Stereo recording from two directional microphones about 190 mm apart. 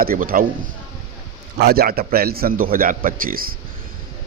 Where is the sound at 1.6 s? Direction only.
55° right (ahead or behind).